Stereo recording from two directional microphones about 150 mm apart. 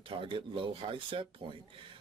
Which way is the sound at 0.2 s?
35° right (ahead or behind).